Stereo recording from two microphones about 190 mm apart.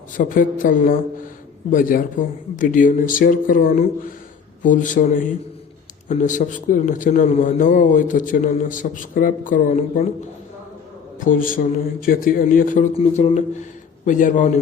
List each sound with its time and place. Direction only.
0.2 s a man's voice: 45° left (ahead or behind)
11.2 s a man's voice: 45° left (ahead or behind)